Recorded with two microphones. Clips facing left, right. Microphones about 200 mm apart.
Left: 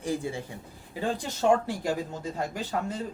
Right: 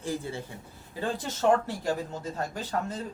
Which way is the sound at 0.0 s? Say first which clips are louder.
Left 2 dB; 15° left (ahead or behind).